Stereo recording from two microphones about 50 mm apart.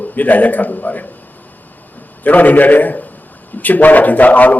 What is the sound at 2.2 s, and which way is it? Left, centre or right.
A man's voice, left.